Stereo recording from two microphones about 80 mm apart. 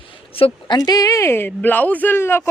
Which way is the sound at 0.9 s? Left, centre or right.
Left.